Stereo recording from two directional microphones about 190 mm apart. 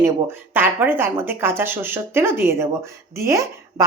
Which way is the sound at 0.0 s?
10° right (ahead or behind).